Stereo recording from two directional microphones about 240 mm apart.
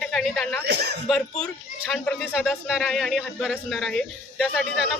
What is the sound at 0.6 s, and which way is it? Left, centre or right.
Speech, right.